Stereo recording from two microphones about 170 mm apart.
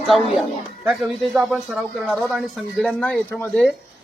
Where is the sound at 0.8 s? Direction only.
5° right (ahead or behind).